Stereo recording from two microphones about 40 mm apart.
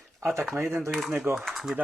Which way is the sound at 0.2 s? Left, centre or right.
Right.